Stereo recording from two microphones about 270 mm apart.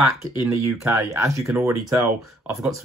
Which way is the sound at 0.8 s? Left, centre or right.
Centre.